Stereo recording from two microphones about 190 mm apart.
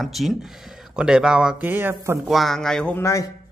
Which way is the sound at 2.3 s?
Centre (ahead or behind).